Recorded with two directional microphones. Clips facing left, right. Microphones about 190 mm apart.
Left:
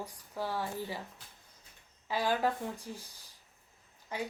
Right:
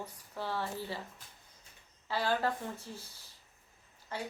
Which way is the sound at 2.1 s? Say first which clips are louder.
Left 1 dB; 15° left (ahead or behind).